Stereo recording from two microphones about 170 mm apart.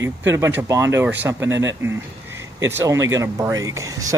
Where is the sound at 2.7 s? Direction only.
15° right (ahead or behind).